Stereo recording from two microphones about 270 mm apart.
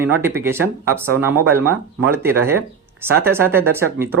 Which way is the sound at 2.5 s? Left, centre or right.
Centre.